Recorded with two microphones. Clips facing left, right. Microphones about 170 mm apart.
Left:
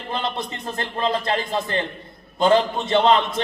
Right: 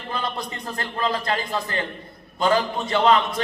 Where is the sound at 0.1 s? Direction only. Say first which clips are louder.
Left 2 dB; 25° left (ahead or behind).